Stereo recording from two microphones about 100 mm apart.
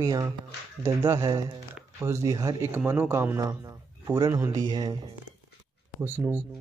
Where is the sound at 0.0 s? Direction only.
35° right (ahead or behind).